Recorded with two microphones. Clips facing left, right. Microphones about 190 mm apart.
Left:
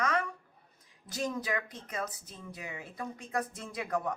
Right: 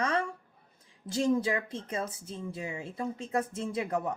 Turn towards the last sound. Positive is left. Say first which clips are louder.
# right 3 dB
turn(degrees=-25)  # may be behind; listen again after turning